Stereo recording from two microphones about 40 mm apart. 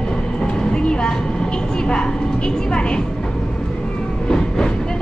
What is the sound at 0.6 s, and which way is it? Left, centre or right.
A woman's voice, left.